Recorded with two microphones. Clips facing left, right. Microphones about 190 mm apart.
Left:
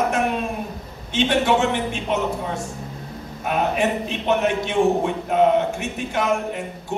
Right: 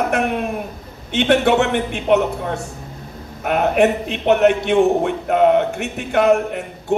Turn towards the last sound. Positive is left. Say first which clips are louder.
# right 7 dB
turn(degrees=-65)  # may be behind; listen again after turning